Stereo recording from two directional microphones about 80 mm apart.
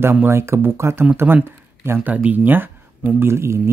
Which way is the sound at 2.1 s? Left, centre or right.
Centre.